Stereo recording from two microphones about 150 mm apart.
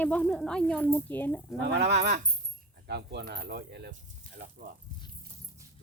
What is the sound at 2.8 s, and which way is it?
Speech, 90° right.